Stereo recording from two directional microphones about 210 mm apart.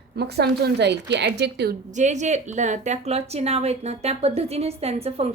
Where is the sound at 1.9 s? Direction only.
35° right (ahead or behind).